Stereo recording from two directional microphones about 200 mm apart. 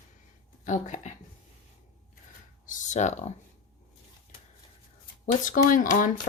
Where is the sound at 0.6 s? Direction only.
40° left (ahead or behind).